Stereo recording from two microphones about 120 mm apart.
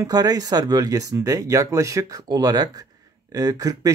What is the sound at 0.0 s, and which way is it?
Speech, 30° right (ahead or behind).